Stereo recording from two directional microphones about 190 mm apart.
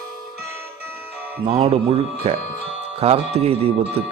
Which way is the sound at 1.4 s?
30° right (ahead or behind).